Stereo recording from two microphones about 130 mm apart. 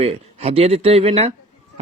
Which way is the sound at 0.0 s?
50° right (ahead or behind).